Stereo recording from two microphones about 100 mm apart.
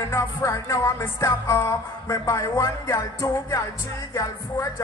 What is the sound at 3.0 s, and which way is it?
Music, 35° left (ahead or behind).